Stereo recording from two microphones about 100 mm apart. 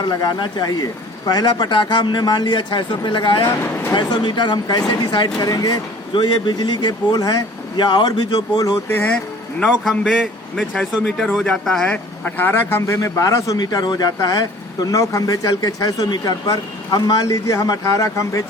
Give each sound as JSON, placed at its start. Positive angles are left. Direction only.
{"t": 0.0, "sound": "a man's voice", "side_deg": 40}
{"t": 9.6, "sound": "a man's voice", "side_deg": 5}
{"t": 12.2, "sound": "a man's voice", "side_deg": 20}